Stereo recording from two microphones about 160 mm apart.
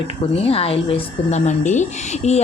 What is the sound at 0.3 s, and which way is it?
A woman's voice, 35° left (ahead or behind).